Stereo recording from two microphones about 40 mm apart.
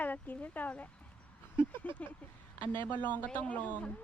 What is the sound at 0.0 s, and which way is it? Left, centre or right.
Speech, left.